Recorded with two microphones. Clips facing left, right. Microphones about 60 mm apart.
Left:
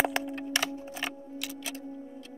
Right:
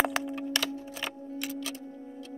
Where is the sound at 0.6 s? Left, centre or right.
Left.